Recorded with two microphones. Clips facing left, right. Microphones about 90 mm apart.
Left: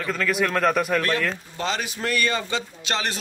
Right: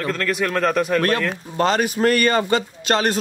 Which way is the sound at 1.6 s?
50° right (ahead or behind).